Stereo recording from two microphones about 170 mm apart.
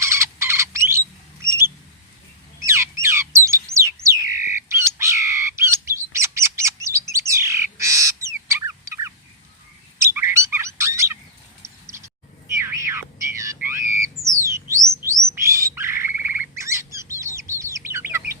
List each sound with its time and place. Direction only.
0.0 s bird: 15° right (ahead or behind)
4.3 s bird: 50° left (ahead or behind)
4.5 s bird: 15° right (ahead or behind)
10.0 s chirp: 15° right (ahead or behind)
11.9 s a sound: 15° right (ahead or behind)
14.3 s rodents: 15° right (ahead or behind)
15.4 s bird: 15° right (ahead or behind)